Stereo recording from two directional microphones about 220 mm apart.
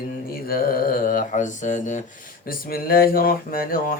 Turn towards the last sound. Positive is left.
turn(degrees=40)  # may be behind; listen again after turning